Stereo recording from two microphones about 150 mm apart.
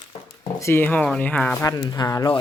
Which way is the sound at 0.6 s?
15° left (ahead or behind).